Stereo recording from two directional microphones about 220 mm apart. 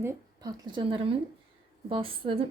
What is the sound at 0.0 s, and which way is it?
Speech, 15° right (ahead or behind).